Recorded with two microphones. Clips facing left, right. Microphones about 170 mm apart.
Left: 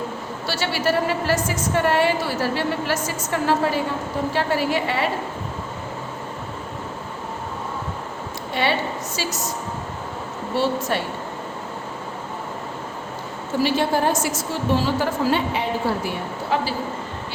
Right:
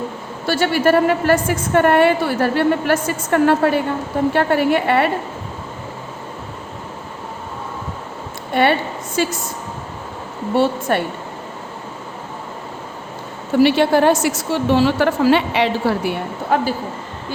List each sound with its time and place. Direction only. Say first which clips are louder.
0.4 s a woman's voice: right 7 dB; 55° right (ahead or behind)
8.5 s a woman's voice: right 6 dB; 55° right (ahead or behind)
10.5 s a woman's voice: right 5 dB; 55° right (ahead or behind)
13.6 s a woman's voice: right 7 dB; 70° right (ahead or behind)
16.5 s a man's voice: right 5 dB; 50° right (ahead or behind)